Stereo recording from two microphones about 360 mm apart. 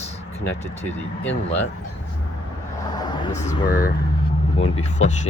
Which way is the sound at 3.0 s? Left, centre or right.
Centre.